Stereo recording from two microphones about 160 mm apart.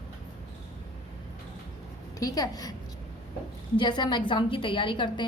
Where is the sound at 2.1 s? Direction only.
25° left (ahead or behind).